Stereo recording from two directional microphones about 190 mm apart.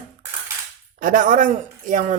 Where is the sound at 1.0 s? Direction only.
45° right (ahead or behind).